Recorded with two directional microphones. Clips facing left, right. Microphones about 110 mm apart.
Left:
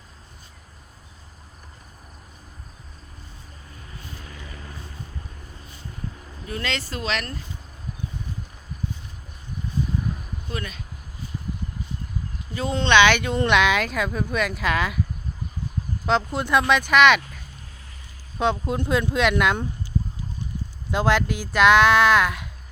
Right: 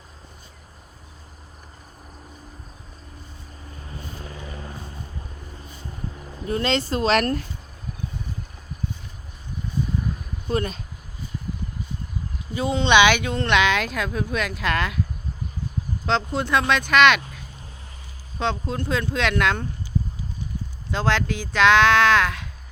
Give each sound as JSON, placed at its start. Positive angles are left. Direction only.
{"t": 4.0, "sound": "vehicle", "side_deg": -35}
{"t": 6.4, "sound": "speech", "side_deg": -30}
{"t": 7.1, "sound": "speech", "side_deg": -50}
{"t": 10.5, "sound": "speech", "side_deg": -35}
{"t": 12.5, "sound": "speech", "side_deg": -10}
{"t": 16.0, "sound": "speech", "side_deg": 5}
{"t": 20.9, "sound": "speech", "side_deg": 5}